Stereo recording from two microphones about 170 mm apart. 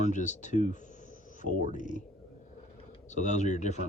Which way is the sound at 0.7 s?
45° left (ahead or behind).